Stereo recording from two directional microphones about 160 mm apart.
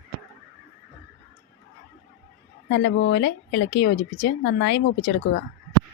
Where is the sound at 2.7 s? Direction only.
85° left.